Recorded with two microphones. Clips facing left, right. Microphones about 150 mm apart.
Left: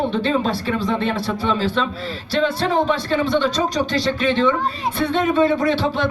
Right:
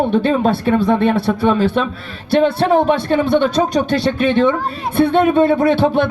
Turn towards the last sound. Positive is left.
turn(degrees=-55)  # may be behind; listen again after turning